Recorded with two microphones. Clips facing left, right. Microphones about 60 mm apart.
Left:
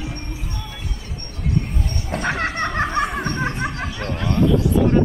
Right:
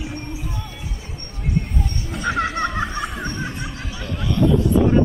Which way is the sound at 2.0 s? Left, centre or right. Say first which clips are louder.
Even; left.